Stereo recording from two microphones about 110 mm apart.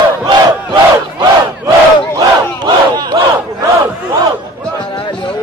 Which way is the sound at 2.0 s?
20° left (ahead or behind).